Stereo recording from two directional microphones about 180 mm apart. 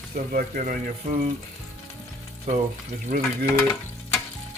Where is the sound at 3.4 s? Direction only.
15° left (ahead or behind).